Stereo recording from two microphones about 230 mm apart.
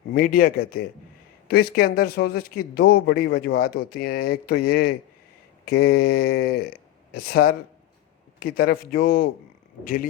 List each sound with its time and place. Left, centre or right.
0.1 s a man's voice: left